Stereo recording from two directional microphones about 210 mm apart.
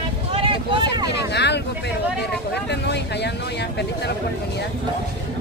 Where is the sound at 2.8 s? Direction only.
55° left (ahead or behind).